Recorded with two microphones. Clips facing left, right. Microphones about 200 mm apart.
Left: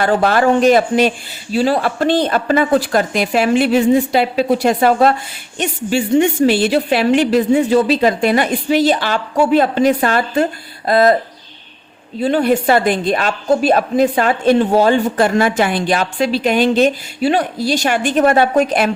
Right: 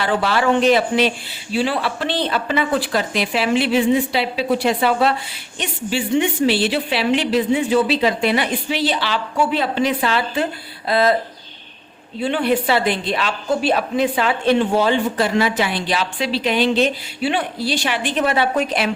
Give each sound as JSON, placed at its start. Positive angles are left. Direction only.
{"t": 0.0, "sound": "a woman's voice", "side_deg": 45}
{"t": 12.2, "sound": "a woman's voice", "side_deg": 40}